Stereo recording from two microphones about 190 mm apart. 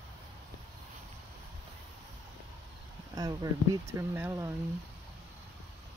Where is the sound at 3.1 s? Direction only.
20° right (ahead or behind).